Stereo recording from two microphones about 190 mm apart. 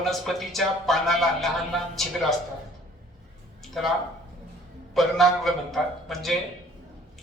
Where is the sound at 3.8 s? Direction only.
Centre (ahead or behind).